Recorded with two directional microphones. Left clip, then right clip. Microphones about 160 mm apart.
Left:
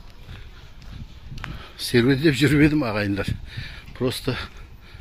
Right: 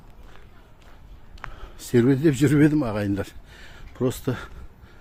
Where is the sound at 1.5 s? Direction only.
20° right (ahead or behind).